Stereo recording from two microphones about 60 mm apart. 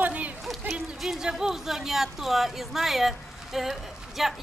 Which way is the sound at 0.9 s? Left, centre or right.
Centre.